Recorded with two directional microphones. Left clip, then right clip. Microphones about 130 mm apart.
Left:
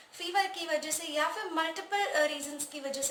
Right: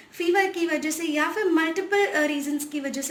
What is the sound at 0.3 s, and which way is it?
A woman's voice, 20° left (ahead or behind).